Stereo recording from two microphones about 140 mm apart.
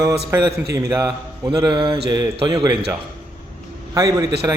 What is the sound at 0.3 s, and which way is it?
Speech, 20° right (ahead or behind).